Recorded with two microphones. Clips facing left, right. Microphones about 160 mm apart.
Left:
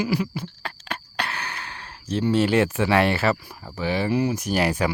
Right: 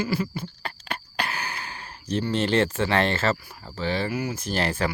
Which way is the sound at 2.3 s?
10° left (ahead or behind).